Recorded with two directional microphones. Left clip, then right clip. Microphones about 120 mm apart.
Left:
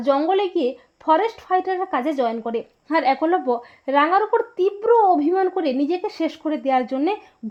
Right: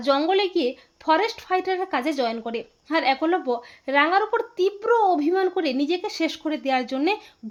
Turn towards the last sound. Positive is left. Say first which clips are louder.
# left 3 dB
turn(degrees=35)  # may be behind; listen again after turning